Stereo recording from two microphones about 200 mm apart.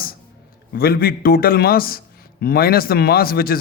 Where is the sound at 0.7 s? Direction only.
50° left (ahead or behind).